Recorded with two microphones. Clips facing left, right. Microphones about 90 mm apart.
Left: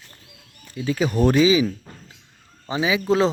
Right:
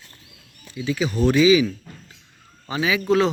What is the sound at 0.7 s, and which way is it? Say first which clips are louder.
Speech: left 2 dB; 45° left (ahead or behind).